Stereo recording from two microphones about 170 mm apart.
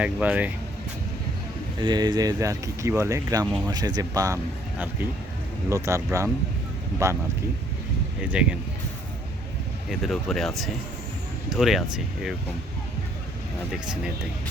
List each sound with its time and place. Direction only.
0.0 s speech: 10° right (ahead or behind)
1.8 s speech: 25° right (ahead or behind)
5.6 s speech: 15° right (ahead or behind)
8.2 s speech: 5° right (ahead or behind)
9.9 s speech: centre (ahead or behind)